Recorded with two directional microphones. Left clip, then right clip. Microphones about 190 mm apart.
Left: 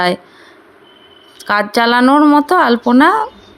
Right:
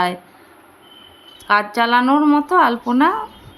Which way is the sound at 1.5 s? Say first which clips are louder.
Left 3 dB; 40° left (ahead or behind).